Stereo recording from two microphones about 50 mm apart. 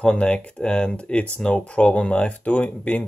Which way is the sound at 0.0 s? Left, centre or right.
Left.